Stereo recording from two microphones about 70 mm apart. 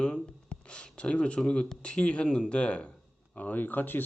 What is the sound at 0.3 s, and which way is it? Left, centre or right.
Speech, centre.